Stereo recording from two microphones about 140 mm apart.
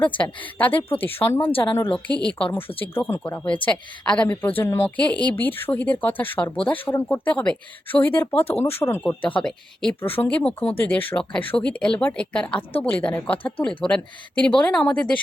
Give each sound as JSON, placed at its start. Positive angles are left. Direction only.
{"t": 0.2, "sound": "a woman's voice", "side_deg": 10}
{"t": 1.5, "sound": "a woman's voice", "side_deg": 35}
{"t": 2.4, "sound": "a woman's voice", "side_deg": 15}
{"t": 8.4, "sound": "speech", "side_deg": 45}
{"t": 8.7, "sound": "a woman's voice", "side_deg": 15}
{"t": 9.3, "sound": "a woman's voice", "side_deg": 5}